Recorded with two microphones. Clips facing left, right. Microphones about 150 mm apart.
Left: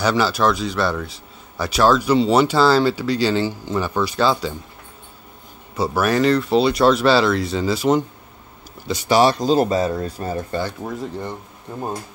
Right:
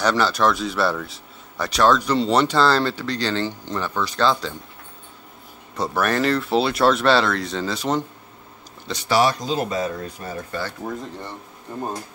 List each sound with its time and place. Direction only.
0.0 s a man's voice: 5° left (ahead or behind)
5.8 s a man's voice: 5° left (ahead or behind)
9.1 s speech: 30° left (ahead or behind)
10.8 s speech: 10° left (ahead or behind)